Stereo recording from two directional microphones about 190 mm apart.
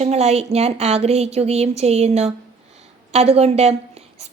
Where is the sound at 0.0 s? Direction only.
35° right (ahead or behind).